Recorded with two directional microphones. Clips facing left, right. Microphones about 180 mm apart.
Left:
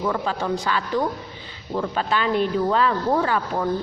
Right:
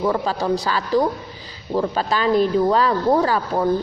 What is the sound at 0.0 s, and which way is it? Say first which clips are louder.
Speech: right 4 dB; 35° right (ahead or behind).